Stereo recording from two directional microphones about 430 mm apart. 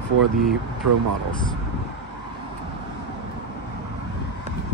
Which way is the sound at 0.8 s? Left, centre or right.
Right.